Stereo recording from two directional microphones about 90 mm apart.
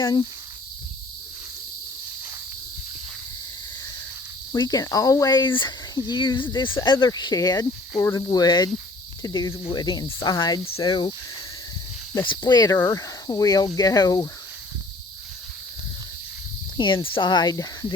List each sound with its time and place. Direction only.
0.0 s speech: 50° left (ahead or behind)
4.5 s speech: 45° left (ahead or behind)
10.8 s speech: 60° left (ahead or behind)
12.2 s speech: 60° left (ahead or behind)
12.7 s speech: 35° left (ahead or behind)
13.2 s speech: 45° left (ahead or behind)
16.7 s speech: 60° left (ahead or behind)
17.2 s speech: 50° left (ahead or behind)